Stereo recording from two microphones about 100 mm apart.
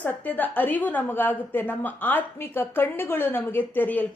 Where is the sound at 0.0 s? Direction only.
15° left (ahead or behind).